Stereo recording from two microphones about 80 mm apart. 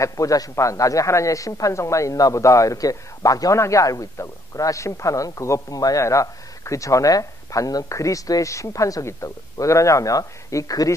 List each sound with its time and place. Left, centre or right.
0.0 s a man's voice: left